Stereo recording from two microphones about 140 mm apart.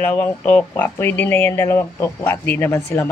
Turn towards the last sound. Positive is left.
turn(degrees=20)  # may be behind; listen again after turning